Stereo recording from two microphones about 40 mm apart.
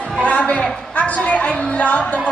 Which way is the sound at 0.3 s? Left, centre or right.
Left.